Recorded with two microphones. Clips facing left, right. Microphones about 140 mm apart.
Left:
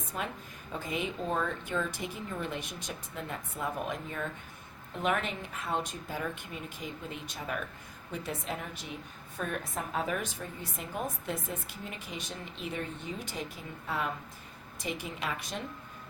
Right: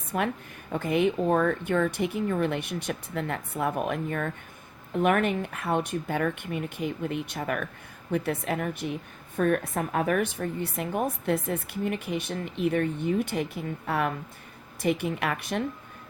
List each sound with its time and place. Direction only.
0.1 s speech: 60° right (ahead or behind)